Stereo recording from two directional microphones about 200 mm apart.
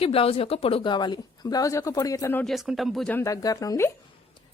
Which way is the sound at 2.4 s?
Centre (ahead or behind).